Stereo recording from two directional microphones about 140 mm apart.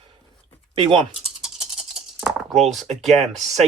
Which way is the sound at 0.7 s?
40° right (ahead or behind).